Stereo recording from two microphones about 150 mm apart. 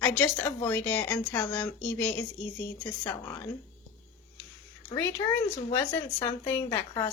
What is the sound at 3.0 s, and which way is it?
Speech, 20° left (ahead or behind).